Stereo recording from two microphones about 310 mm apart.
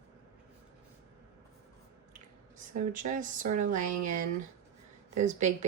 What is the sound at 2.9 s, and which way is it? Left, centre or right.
Speech, right.